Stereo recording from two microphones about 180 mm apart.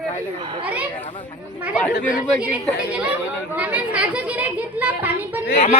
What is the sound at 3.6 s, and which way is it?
Speech, 10° right (ahead or behind).